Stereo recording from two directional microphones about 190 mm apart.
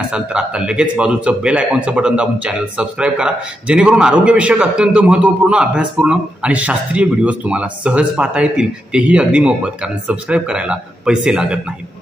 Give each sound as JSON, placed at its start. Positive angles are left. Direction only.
{"t": 0.1, "sound": "speech", "side_deg": -5}